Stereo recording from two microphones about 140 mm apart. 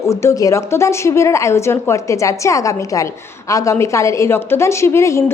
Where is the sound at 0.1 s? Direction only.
20° left (ahead or behind).